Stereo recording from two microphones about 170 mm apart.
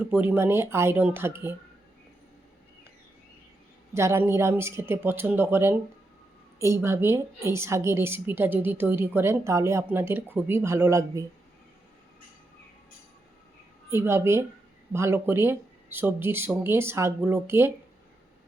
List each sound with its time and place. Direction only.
0.1 s a woman's voice: 10° right (ahead or behind)
3.9 s a woman's voice: 15° right (ahead or behind)
13.9 s a woman's voice: 15° right (ahead or behind)